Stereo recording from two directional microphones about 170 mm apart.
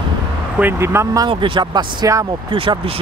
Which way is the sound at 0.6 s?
15° right (ahead or behind).